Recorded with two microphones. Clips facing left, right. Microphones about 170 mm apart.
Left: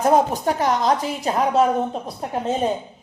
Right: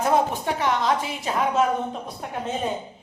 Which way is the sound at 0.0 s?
40° left (ahead or behind).